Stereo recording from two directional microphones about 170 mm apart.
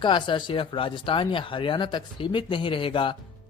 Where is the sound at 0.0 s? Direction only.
30° left (ahead or behind).